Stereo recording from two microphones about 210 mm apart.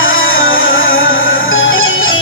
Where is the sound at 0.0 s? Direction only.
70° left (ahead or behind).